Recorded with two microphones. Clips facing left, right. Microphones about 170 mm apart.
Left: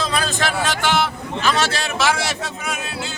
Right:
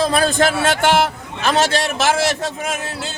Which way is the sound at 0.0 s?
50° right (ahead or behind).